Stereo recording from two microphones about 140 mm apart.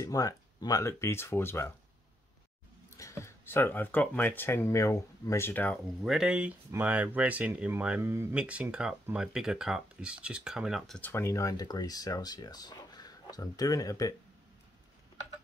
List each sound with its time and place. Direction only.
0.0 s speech: 25° left (ahead or behind)
3.0 s speech: 20° left (ahead or behind)
6.0 s speech: 5° right (ahead or behind)
11.0 s speech: 15° left (ahead or behind)